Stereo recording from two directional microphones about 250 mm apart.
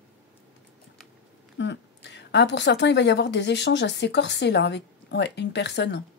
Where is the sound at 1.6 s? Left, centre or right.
Left.